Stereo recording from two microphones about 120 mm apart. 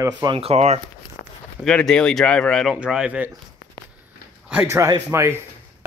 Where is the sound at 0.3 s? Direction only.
55° right (ahead or behind).